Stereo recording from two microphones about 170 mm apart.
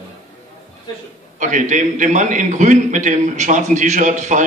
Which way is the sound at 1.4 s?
45° right (ahead or behind).